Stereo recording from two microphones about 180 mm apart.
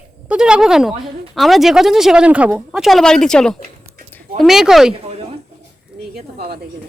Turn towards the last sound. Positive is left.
turn(degrees=-60)  # may be behind; listen again after turning